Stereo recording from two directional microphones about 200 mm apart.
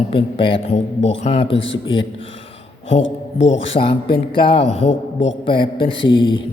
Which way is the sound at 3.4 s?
30° left (ahead or behind).